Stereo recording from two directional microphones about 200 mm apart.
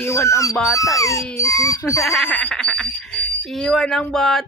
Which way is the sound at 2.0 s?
5° left (ahead or behind).